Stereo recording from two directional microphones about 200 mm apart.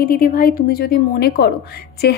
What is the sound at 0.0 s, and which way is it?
A woman's voice, 45° left (ahead or behind).